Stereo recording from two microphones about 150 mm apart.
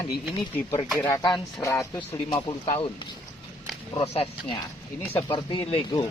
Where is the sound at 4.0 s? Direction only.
40° left (ahead or behind).